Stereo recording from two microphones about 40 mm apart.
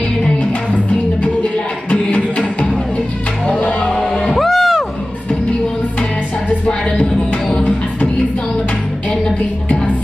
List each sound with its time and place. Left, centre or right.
1.9 s music: left
3.9 s music: centre
6.6 s music: left